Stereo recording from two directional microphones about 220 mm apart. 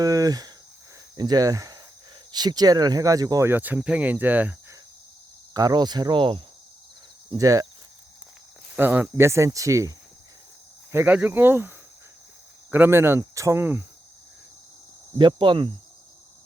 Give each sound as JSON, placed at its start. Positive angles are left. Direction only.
{"t": 0.0, "sound": "speech", "side_deg": -15}
{"t": 5.5, "sound": "speech", "side_deg": -20}
{"t": 8.7, "sound": "speech", "side_deg": -10}
{"t": 10.9, "sound": "speech", "side_deg": -10}
{"t": 12.7, "sound": "speech", "side_deg": -10}
{"t": 15.2, "sound": "speech", "side_deg": -20}